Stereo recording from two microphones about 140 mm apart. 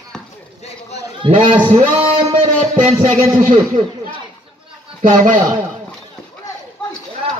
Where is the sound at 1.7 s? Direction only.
45° right (ahead or behind).